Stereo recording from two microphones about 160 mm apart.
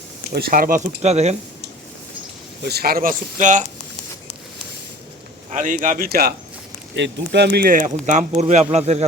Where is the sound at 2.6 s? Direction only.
85° right; by 3.6 s 50° right (ahead or behind).